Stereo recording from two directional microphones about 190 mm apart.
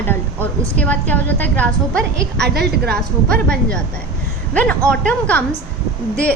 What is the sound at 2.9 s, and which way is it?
A woman's voice, 5° left (ahead or behind).